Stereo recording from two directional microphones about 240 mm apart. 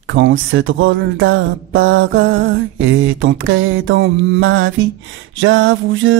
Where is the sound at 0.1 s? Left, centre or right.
Right.